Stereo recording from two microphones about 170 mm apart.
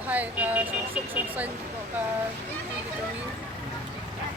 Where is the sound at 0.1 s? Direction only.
10° right (ahead or behind).